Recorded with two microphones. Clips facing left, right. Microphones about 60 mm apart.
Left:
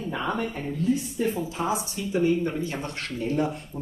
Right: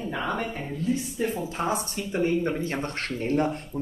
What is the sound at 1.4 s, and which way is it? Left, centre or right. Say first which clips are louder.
Speech: even; right.